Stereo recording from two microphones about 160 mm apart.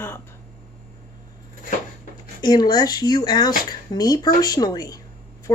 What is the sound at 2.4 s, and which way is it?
Speech, 25° left (ahead or behind).